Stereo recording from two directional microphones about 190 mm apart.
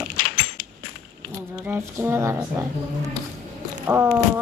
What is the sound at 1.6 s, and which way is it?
Speech, 10° right (ahead or behind).